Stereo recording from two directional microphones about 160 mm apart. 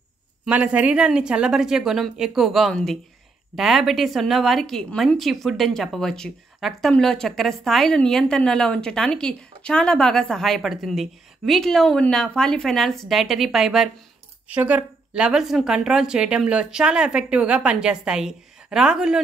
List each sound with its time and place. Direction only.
0.5 s a woman's voice: 10° right (ahead or behind)